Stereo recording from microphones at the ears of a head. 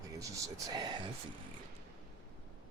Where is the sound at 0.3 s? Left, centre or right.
Right.